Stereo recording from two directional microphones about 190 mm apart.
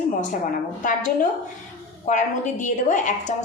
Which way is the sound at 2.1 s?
40° left (ahead or behind).